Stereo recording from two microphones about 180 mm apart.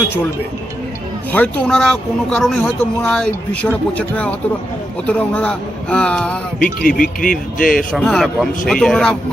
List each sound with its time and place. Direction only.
1.3 s speech: 10° left (ahead or behind)
6.7 s speech: 50° left (ahead or behind)
7.9 s speech: centre (ahead or behind)